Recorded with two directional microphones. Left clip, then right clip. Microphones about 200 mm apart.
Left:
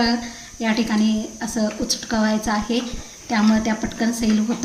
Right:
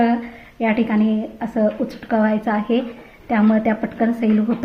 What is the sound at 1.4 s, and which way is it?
Speech, 25° right (ahead or behind).